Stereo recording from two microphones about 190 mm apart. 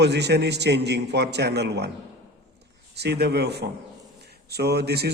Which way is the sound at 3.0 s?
60° right (ahead or behind).